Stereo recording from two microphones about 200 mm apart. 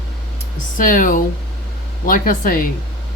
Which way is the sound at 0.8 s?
40° left (ahead or behind).